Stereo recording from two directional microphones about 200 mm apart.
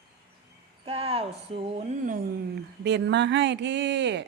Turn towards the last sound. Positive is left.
turn(degrees=-60)  # may be behind; listen again after turning